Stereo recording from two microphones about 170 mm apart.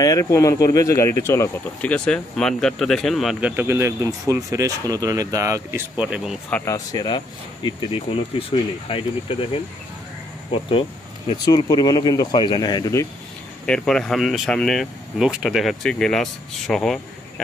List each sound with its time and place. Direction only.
0.0 s speech: 20° left (ahead or behind); by 6.3 s 5° right (ahead or behind)
6.5 s speech: 15° left (ahead or behind)
13.7 s speech: 5° left (ahead or behind)